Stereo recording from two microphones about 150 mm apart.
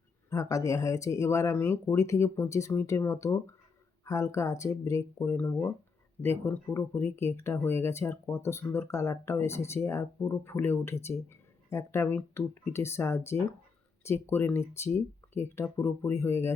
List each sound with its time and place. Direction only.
0.3 s speech: 20° left (ahead or behind)